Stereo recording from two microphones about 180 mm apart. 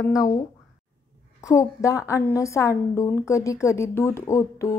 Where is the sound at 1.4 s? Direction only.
20° left (ahead or behind).